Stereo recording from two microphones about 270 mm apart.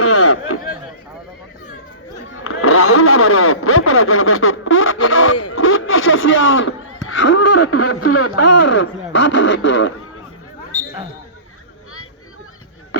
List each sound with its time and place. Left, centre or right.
0.0 s a sound: left
2.3 s speech: left
7.3 s speech: left
8.5 s speech: left